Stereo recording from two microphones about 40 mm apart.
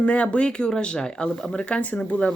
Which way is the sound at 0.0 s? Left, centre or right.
Left.